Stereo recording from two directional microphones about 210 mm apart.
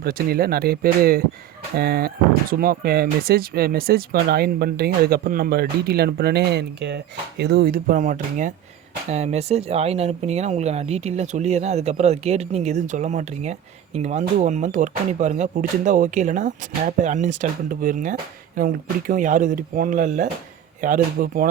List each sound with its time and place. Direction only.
0.0 s speech: 45° right (ahead or behind)